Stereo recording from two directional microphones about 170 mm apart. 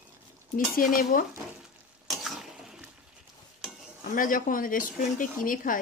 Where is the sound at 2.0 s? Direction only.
Centre (ahead or behind).